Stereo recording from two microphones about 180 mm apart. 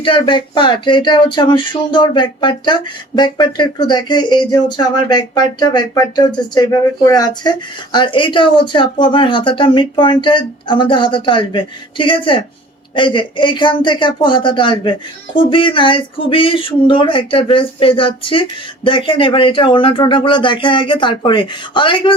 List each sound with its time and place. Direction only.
0.0 s speech: 25° left (ahead or behind)